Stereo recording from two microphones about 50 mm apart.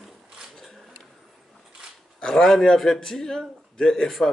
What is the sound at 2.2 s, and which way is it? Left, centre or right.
A man's voice, centre.